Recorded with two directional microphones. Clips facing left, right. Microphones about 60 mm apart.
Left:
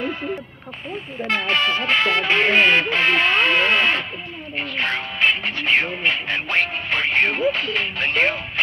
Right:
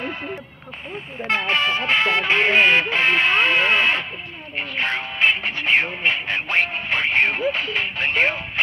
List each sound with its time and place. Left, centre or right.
1.2 s speech: right
4.6 s music: centre